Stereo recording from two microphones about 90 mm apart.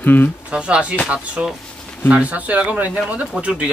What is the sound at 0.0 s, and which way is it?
Speech, 20° left (ahead or behind).